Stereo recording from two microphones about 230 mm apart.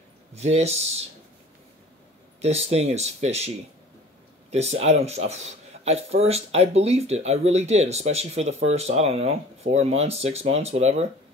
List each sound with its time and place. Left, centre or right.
0.3 s speech: right
2.4 s speech: right